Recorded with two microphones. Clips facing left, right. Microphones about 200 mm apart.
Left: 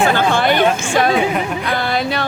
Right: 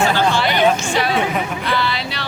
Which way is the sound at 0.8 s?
50° left (ahead or behind).